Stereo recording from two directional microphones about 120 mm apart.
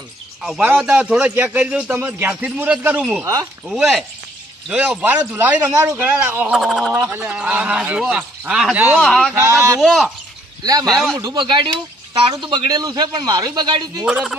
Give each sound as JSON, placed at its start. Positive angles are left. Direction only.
{"t": 0.4, "sound": "speech", "side_deg": -5}
{"t": 6.5, "sound": "speech", "side_deg": 0}
{"t": 7.1, "sound": "speech", "side_deg": -10}
{"t": 9.0, "sound": "speech", "side_deg": 5}
{"t": 10.6, "sound": "a man's voice", "side_deg": -30}
{"t": 11.4, "sound": "a man's voice", "side_deg": -45}
{"t": 14.0, "sound": "speech", "side_deg": 0}